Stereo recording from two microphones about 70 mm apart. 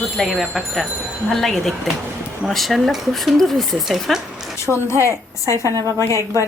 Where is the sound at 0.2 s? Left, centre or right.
Centre.